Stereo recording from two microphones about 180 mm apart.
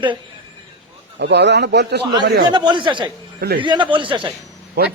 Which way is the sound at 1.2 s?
70° right (ahead or behind).